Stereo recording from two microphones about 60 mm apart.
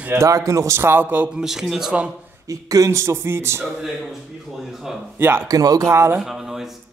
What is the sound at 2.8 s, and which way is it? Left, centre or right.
Speech, right.